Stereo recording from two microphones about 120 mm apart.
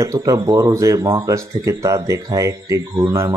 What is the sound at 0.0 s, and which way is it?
Speech, 25° right (ahead or behind).